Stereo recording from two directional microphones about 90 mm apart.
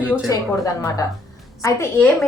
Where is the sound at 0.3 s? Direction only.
40° left (ahead or behind).